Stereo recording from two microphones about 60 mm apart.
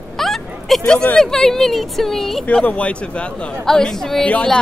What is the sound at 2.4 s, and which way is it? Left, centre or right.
Speech, left.